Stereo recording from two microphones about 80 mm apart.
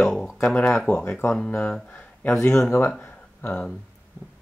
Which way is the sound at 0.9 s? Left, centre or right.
Centre.